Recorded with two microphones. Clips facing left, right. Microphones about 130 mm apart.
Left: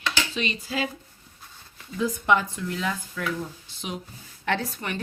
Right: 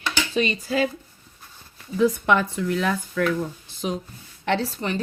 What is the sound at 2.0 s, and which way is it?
Speech, 65° right (ahead or behind).